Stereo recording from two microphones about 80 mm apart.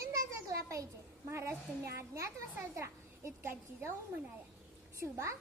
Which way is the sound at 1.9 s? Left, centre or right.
Right.